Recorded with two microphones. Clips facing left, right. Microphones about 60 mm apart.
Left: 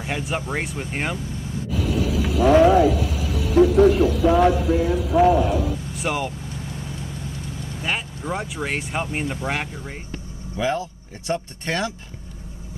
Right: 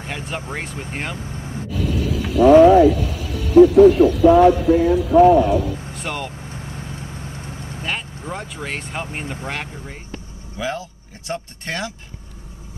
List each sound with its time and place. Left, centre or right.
0.5 s speech: centre
1.1 s vehicle: right
1.7 s speech: centre
6.5 s vehicle: right
7.8 s speech: centre